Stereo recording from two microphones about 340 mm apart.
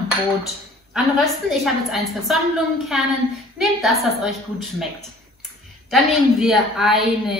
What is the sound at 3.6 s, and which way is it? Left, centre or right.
Speech, centre.